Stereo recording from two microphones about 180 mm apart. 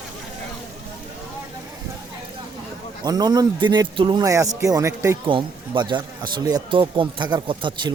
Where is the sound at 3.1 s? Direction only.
20° right (ahead or behind).